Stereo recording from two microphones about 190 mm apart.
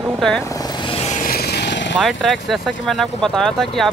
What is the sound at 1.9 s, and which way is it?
Speech, centre (ahead or behind).